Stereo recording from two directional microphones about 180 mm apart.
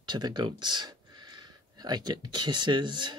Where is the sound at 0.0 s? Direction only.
25° right (ahead or behind).